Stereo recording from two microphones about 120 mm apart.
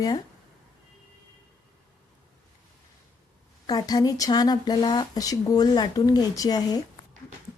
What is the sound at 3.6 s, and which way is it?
A woman's voice, 35° left (ahead or behind).